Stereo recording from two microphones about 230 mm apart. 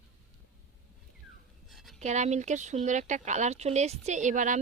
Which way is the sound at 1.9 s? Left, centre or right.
Right.